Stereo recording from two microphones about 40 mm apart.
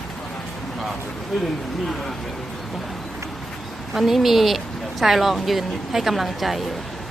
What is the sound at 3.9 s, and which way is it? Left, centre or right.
Speech, centre.